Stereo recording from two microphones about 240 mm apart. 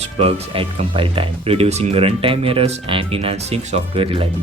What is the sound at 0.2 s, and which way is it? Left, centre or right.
Speech, right.